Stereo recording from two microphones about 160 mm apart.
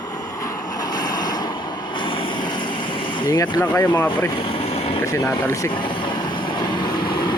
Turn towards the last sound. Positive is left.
turn(degrees=15)  # may be behind; listen again after turning